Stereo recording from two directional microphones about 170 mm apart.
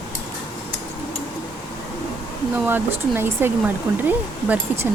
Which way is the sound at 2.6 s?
15° right (ahead or behind).